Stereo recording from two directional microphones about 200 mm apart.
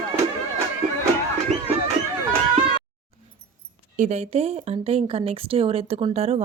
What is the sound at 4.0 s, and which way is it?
Speech, 30° right (ahead or behind).